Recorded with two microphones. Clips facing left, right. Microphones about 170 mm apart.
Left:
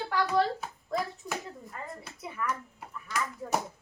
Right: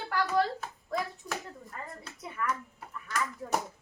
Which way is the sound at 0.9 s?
Centre (ahead or behind).